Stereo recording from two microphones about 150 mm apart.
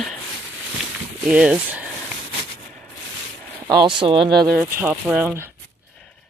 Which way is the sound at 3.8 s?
35° right (ahead or behind).